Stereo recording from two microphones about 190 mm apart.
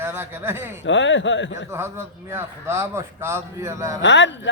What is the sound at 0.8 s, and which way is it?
Speech, 75° left (ahead or behind).